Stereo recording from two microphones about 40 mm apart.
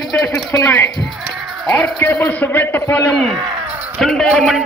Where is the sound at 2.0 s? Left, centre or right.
Left.